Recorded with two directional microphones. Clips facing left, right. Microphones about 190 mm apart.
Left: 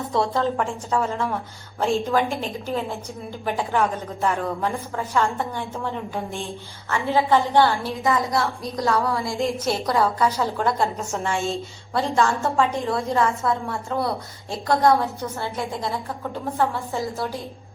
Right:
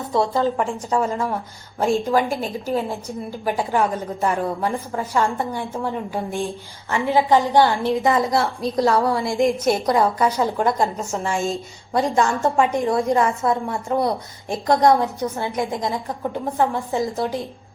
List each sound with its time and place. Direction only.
0.1 s a woman's voice: centre (ahead or behind)
0.9 s a woman's voice: 15° right (ahead or behind)
3.6 s a woman's voice: 10° right (ahead or behind)
8.0 s a woman's voice: 25° right (ahead or behind)
9.4 s a woman's voice: 15° right (ahead or behind)
11.1 s a woman's voice: centre (ahead or behind)
11.9 s a woman's voice: 20° right (ahead or behind)